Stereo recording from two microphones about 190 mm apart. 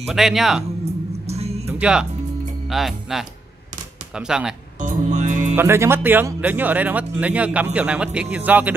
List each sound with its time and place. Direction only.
0.0 s speech: centre (ahead or behind)
1.2 s music: 35° right (ahead or behind)
1.7 s music: 5° right (ahead or behind)
2.7 s speech: centre (ahead or behind)
4.7 s music: 40° right (ahead or behind)
5.6 s speech: 15° right (ahead or behind)